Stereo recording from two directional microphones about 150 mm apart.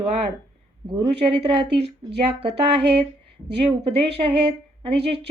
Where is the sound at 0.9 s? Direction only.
35° right (ahead or behind).